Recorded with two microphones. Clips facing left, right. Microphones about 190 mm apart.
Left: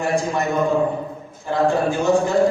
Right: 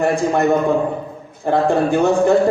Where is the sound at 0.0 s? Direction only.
60° right (ahead or behind).